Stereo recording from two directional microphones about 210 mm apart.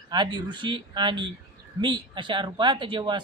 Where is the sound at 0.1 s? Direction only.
20° right (ahead or behind).